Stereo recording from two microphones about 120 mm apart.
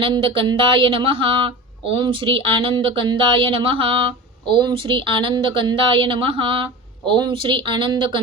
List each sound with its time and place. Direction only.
0.0 s speech: 45° right (ahead or behind)